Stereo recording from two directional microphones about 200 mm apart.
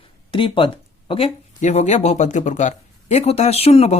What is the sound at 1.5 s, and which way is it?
Speech, 35° left (ahead or behind).